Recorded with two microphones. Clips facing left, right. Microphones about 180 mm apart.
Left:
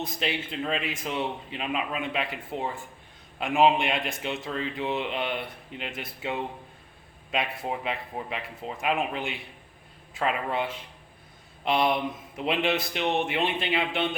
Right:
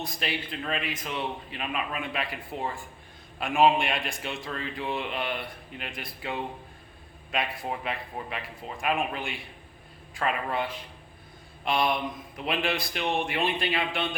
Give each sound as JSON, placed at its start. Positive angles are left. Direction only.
{"t": 0.0, "sound": "a man's voice", "side_deg": 20}